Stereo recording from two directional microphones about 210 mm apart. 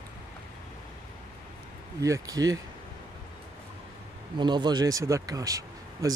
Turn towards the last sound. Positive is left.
turn(degrees=-15)  # may be behind; listen again after turning